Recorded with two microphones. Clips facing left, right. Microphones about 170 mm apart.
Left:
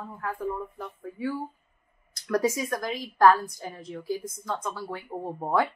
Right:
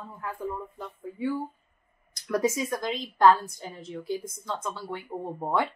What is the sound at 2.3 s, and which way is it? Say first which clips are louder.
Speech: left 1 dB; 25° right (ahead or behind).